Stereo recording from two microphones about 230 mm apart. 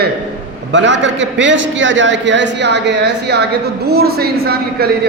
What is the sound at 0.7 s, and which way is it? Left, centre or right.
A man's voice, right.